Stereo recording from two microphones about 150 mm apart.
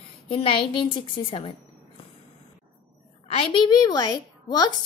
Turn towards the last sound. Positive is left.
turn(degrees=25)  # may be behind; listen again after turning